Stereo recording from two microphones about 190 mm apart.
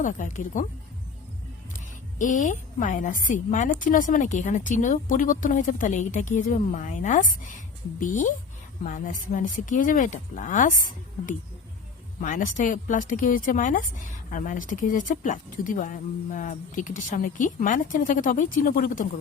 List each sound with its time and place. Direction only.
0.0 s speech: 40° left (ahead or behind)
2.1 s a woman's voice: 40° left (ahead or behind)
12.2 s a woman's voice: 40° left (ahead or behind)